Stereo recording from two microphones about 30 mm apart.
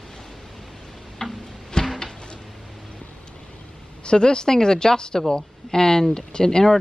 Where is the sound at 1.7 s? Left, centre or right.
Left.